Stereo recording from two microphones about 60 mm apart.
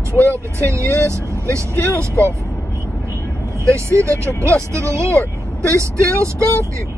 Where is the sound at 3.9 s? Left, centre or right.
Right.